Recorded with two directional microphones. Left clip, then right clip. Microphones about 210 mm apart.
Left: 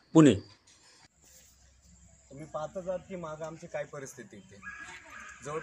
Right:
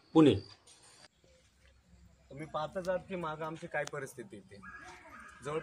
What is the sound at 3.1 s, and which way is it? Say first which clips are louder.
A man's voice: right 1 dB; 5° right (ahead or behind).